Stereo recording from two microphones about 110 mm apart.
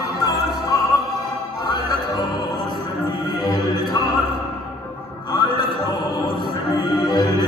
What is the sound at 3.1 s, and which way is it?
Music, 35° left (ahead or behind).